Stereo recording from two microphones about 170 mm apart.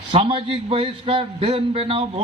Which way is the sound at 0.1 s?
30° right (ahead or behind).